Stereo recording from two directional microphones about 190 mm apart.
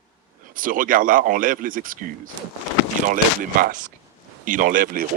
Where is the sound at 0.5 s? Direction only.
45° right (ahead or behind).